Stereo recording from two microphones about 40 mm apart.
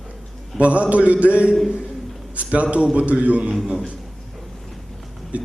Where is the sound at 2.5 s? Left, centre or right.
Right.